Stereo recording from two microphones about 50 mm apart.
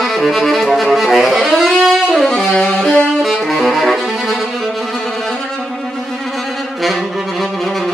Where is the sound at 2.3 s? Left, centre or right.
Centre.